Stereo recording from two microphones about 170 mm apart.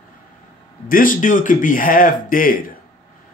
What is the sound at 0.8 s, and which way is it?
Speech, 55° left (ahead or behind).